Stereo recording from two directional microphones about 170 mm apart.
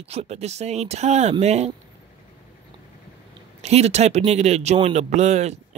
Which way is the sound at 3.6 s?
40° right (ahead or behind).